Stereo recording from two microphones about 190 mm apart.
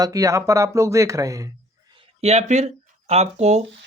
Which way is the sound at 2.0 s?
35° right (ahead or behind).